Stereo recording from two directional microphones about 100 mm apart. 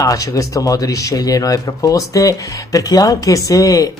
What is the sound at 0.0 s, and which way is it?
Speech, 35° left (ahead or behind).